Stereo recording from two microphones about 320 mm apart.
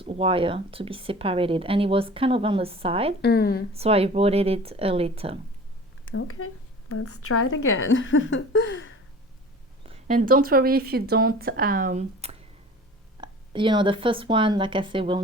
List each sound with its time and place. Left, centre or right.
0.0 s speech: centre
3.2 s speech: left
3.7 s speech: centre
6.1 s a woman's voice: left
9.8 s speech: right